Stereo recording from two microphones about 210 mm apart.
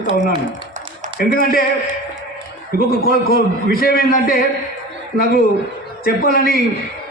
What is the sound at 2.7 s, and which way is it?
Speech, 45° right (ahead or behind).